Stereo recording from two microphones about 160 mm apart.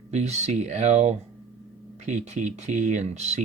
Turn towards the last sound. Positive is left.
turn(degrees=-45)  # may be behind; listen again after turning